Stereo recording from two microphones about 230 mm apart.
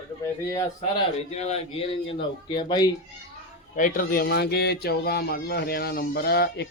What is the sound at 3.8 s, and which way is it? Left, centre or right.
Speech, left.